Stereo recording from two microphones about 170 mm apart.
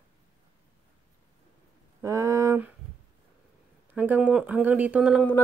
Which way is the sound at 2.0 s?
20° right (ahead or behind).